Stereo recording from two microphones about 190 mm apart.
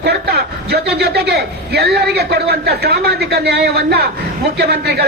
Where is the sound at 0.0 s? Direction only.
55° right (ahead or behind).